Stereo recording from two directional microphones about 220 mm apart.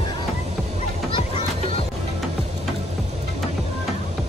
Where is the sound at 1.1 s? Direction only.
25° left (ahead or behind).